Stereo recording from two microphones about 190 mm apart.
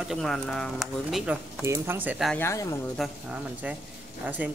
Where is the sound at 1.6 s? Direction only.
15° right (ahead or behind).